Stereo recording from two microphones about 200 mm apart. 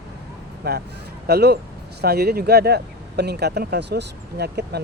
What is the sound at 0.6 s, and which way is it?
Speech, 55° right (ahead or behind).